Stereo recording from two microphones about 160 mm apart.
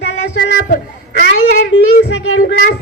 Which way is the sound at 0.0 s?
90° left.